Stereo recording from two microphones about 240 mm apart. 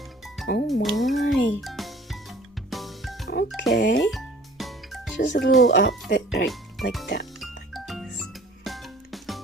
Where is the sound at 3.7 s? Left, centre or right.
Left.